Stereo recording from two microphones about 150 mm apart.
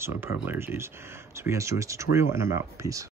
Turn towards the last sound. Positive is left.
turn(degrees=-20)  # may be behind; listen again after turning